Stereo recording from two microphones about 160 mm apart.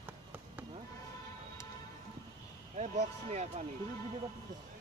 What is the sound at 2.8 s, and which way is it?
Speech, 45° right (ahead or behind).